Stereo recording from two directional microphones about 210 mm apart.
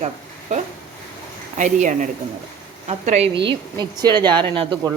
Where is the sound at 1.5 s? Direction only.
35° right (ahead or behind).